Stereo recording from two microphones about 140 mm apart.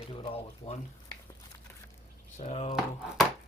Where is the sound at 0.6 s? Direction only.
35° left (ahead or behind).